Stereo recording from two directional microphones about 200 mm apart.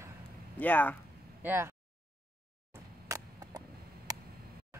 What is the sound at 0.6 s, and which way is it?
Speech, 10° left (ahead or behind).